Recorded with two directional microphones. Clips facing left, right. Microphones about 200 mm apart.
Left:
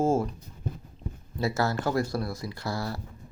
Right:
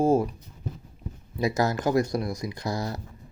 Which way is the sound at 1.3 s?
15° right (ahead or behind).